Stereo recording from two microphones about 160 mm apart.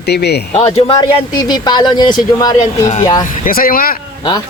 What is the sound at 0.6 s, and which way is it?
Speech, 40° left (ahead or behind).